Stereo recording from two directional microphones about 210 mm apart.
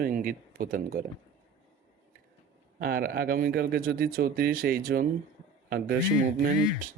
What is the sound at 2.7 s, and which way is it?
Speech, 45° right (ahead or behind).